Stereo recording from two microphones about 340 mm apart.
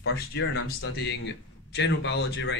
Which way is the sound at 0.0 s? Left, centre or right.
Left.